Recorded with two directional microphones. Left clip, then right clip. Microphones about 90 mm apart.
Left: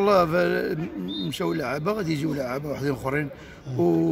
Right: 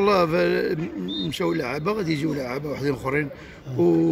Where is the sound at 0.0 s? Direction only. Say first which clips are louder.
Even; 60° left (ahead or behind).